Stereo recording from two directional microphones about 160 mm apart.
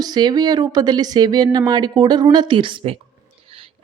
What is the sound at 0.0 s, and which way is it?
A woman's voice, 25° right (ahead or behind).